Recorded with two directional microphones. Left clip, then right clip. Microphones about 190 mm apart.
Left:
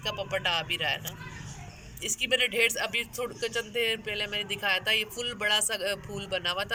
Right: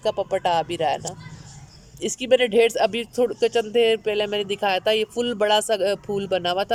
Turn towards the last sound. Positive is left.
turn(degrees=-45)  # may be behind; listen again after turning